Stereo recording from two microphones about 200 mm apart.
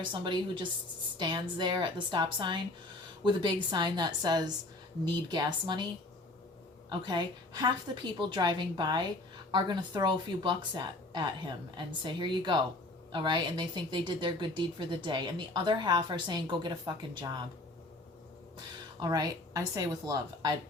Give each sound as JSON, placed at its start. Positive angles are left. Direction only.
{"t": 0.0, "sound": "speech", "side_deg": -25}
{"t": 7.0, "sound": "speech", "side_deg": -20}
{"t": 18.9, "sound": "speech", "side_deg": -20}